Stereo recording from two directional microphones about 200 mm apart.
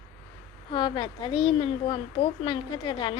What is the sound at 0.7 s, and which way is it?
A woman's voice, 25° left (ahead or behind).